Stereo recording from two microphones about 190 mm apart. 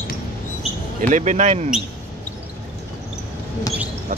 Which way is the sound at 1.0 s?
40° right (ahead or behind).